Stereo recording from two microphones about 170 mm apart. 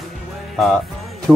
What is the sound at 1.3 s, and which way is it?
Speech, 5° left (ahead or behind).